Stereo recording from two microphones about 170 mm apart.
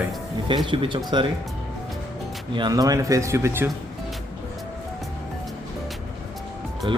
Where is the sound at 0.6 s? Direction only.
30° right (ahead or behind).